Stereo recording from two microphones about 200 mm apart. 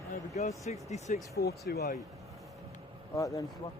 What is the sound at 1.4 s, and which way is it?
Speech, 55° left (ahead or behind).